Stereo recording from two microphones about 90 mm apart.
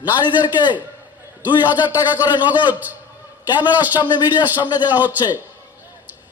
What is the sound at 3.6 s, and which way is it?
A man's voice, 20° right (ahead or behind).